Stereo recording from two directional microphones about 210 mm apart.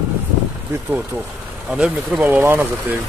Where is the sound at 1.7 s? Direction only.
5° right (ahead or behind).